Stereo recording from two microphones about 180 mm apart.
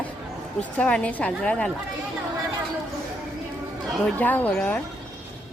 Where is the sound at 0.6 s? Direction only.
5° left (ahead or behind).